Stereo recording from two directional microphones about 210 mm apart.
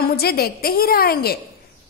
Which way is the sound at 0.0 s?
45° left (ahead or behind).